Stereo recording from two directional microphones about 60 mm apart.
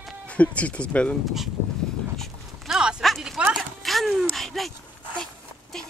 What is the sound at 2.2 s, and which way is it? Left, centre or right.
Walk, centre.